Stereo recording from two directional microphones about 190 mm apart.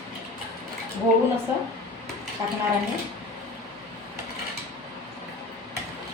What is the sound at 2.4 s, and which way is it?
Speech, 20° right (ahead or behind).